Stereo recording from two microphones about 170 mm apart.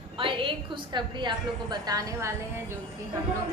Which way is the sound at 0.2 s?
30° right (ahead or behind).